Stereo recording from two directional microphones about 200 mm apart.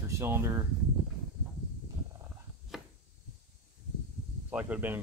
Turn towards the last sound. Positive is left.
turn(degrees=-10)  # may be behind; listen again after turning